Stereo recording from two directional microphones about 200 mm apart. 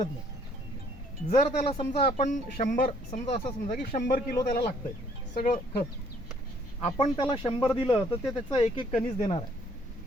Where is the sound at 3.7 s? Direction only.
45° left (ahead or behind).